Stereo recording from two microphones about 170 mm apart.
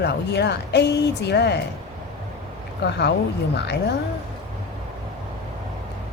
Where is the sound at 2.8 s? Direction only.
80° left.